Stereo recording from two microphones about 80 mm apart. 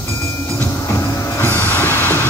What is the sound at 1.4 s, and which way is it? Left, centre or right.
Train, left.